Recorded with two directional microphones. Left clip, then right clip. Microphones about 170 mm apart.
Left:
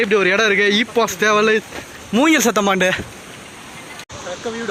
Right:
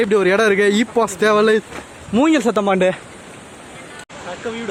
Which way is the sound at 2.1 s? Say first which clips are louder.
Left 1 dB; centre (ahead or behind).